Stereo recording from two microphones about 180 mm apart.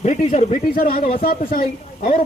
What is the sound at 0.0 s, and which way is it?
A man's voice, 40° left (ahead or behind).